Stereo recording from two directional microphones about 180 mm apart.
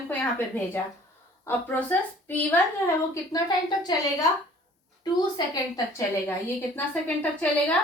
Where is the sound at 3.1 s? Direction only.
20° left (ahead or behind).